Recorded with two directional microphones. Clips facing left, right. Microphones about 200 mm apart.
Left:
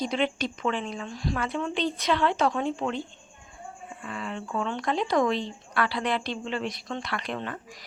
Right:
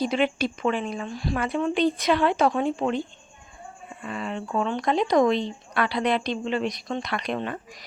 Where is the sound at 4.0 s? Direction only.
20° right (ahead or behind).